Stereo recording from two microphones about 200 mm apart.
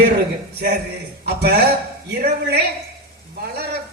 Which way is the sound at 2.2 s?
50° right (ahead or behind).